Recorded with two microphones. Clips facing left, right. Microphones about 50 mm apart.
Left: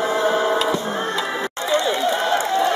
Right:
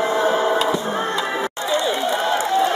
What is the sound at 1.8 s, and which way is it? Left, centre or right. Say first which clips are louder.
Run: right 1 dB; right.